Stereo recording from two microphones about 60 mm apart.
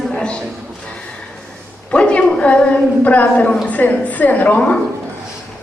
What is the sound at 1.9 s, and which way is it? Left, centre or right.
A woman's voice, centre.